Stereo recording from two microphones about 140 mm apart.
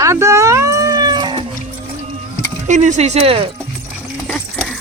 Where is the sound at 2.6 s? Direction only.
60° right (ahead or behind); by 3.5 s 40° right (ahead or behind).